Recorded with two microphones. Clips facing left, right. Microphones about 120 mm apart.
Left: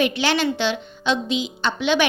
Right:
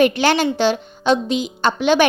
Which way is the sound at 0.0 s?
45° right (ahead or behind).